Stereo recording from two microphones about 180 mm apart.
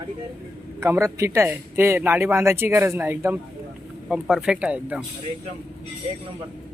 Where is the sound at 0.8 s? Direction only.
15° right (ahead or behind).